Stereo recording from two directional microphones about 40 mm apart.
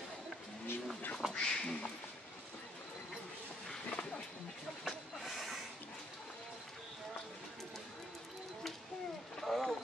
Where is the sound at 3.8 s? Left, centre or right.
Left.